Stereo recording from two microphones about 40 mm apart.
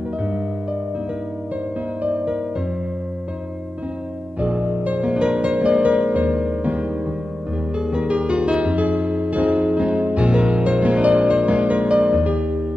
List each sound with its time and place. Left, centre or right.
2.0 s music: right
4.4 s music: right
5.0 s music: right
7.7 s music: right
8.7 s music: right